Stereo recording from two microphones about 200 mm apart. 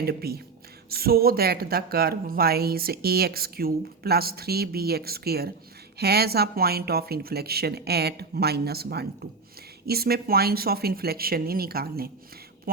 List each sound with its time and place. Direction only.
0.0 s speech: 50° right (ahead or behind)
12.7 s duck: 45° right (ahead or behind)